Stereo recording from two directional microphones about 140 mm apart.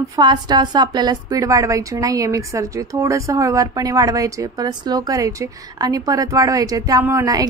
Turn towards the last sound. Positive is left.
turn(degrees=-25)  # may be behind; listen again after turning